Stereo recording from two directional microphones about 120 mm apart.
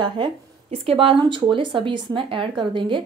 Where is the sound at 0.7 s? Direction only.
55° right (ahead or behind).